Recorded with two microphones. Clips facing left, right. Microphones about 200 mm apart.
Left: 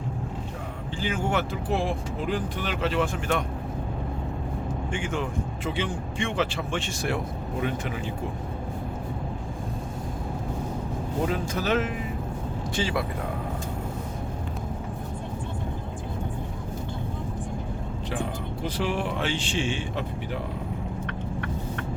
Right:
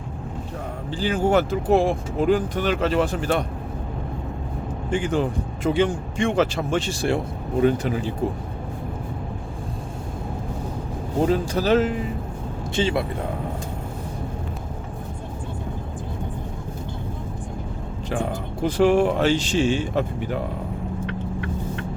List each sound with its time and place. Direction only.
0.9 s speech: 35° right (ahead or behind)
4.9 s speech: 35° right (ahead or behind)
11.3 s speech: 35° right (ahead or behind)
18.6 s speech: 50° right (ahead or behind)
21.1 s vehicle: 55° left (ahead or behind)